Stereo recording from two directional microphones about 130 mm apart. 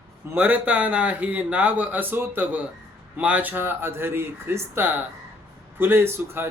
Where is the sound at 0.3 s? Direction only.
10° right (ahead or behind).